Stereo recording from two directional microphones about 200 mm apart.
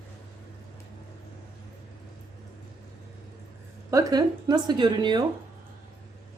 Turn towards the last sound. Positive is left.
turn(degrees=-20)  # may be behind; listen again after turning